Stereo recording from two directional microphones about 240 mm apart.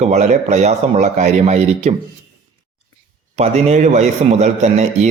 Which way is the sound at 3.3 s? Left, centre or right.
Right.